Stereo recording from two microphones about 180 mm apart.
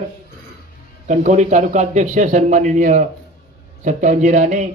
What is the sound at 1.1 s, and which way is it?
A man's voice, 40° right (ahead or behind).